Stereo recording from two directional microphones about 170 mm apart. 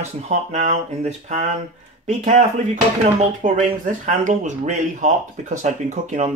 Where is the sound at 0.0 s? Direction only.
45° right (ahead or behind).